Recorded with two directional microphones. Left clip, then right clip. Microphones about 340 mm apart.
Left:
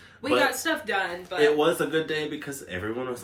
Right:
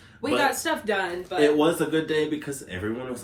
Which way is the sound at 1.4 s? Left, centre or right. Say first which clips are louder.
Right 1 dB; centre.